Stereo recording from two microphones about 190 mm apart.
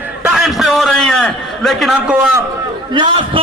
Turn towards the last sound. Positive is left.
turn(degrees=-25)  # may be behind; listen again after turning